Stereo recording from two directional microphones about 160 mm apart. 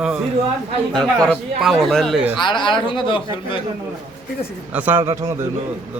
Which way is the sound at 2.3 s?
30° left (ahead or behind).